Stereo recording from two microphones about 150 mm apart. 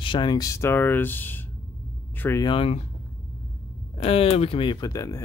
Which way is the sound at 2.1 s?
15° left (ahead or behind).